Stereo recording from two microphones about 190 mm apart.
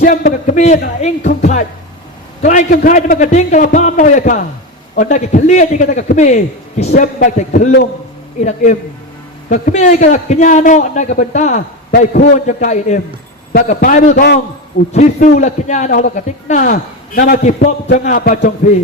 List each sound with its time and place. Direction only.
0.0 s a man's voice: 45° left (ahead or behind)
12.5 s a man's voice: 40° left (ahead or behind)
13.5 s a man's voice: 50° left (ahead or behind)